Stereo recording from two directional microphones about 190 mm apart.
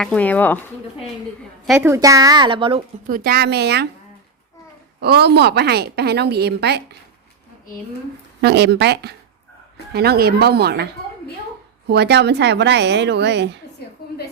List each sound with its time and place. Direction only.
0.0 s speech: 5° left (ahead or behind)
1.8 s speech: 15° right (ahead or behind)
3.1 s a woman's voice: 55° right (ahead or behind)
4.9 s a woman's voice: 60° right (ahead or behind)
8.4 s a woman's voice: 60° right (ahead or behind)
11.9 s a woman's voice: 60° right (ahead or behind)